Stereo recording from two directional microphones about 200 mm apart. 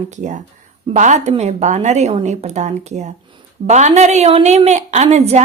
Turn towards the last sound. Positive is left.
turn(degrees=-35)  # may be behind; listen again after turning